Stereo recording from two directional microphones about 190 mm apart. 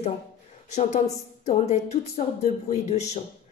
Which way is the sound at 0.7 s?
35° left (ahead or behind).